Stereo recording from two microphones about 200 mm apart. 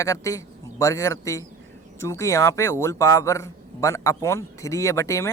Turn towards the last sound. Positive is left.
turn(degrees=15)  # may be behind; listen again after turning